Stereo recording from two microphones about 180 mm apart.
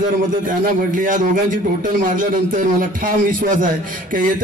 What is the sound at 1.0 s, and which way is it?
A man's voice, 50° right (ahead or behind).